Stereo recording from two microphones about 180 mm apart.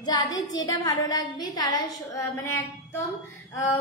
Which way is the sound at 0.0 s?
20° left (ahead or behind).